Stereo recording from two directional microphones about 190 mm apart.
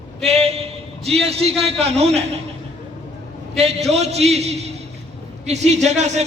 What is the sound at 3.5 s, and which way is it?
A man's voice, 35° right (ahead or behind).